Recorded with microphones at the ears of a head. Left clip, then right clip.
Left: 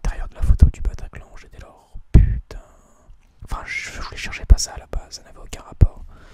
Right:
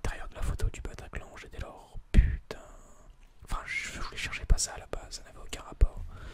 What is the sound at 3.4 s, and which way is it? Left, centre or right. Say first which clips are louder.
Whispering: left 7 dB; left.